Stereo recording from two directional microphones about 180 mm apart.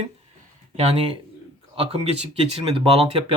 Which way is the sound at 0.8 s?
35° right (ahead or behind).